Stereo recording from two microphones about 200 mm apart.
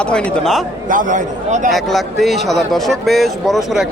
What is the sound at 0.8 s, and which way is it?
Speech, 40° right (ahead or behind).